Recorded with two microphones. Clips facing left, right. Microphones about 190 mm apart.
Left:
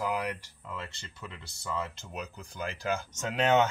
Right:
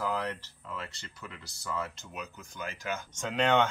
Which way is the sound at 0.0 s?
15° left (ahead or behind).